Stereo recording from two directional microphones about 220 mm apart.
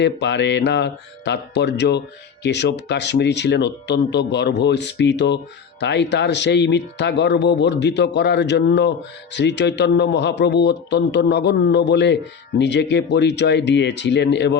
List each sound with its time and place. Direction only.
0.0 s speech: 50° left (ahead or behind)